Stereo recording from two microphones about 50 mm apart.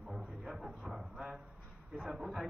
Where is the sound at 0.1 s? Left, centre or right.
Centre.